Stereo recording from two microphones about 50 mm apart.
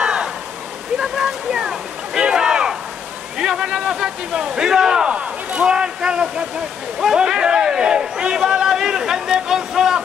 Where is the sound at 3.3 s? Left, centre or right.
Centre.